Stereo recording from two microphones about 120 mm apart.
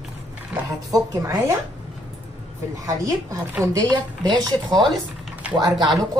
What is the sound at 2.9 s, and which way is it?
Speech, 30° right (ahead or behind).